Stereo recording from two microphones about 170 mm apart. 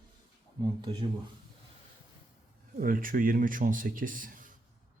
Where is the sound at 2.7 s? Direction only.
55° right (ahead or behind).